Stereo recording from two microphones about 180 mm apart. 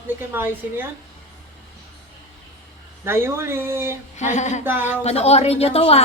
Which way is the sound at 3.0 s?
15° right (ahead or behind).